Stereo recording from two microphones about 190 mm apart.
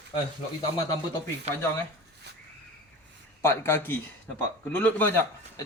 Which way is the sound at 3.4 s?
15° left (ahead or behind).